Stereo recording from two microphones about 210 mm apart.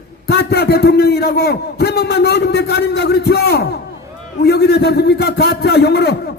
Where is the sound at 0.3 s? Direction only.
50° left (ahead or behind).